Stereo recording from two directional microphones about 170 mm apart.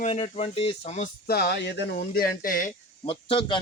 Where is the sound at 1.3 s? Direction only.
70° left (ahead or behind); by 2.7 s 55° left (ahead or behind).